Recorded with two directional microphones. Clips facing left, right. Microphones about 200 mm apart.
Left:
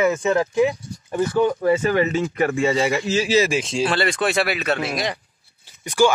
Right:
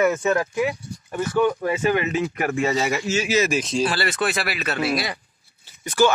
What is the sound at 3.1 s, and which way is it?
Speech, 30° left (ahead or behind).